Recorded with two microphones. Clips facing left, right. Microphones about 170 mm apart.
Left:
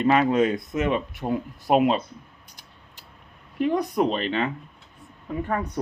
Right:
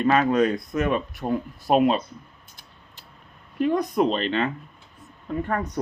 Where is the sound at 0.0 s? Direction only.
20° left (ahead or behind).